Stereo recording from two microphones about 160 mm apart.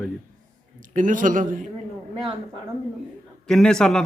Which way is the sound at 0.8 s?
55° right (ahead or behind).